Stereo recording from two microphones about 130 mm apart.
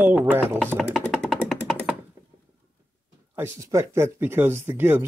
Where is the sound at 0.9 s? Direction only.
5° left (ahead or behind).